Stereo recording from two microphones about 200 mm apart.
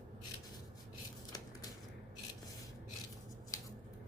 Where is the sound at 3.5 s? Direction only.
15° left (ahead or behind).